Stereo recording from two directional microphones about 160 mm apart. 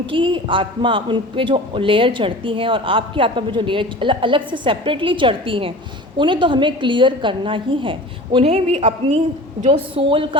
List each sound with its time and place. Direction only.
0.1 s a man's voice: 30° right (ahead or behind)